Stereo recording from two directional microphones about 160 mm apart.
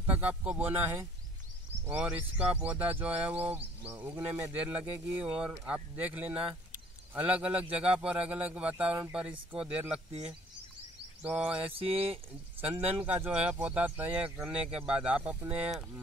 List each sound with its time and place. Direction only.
0.0 s speech: 10° right (ahead or behind)
1.9 s speech: 10° right (ahead or behind)
11.2 s speech: 10° right (ahead or behind)
11.6 s mantra: 35° right (ahead or behind)
12.9 s speech: 10° right (ahead or behind)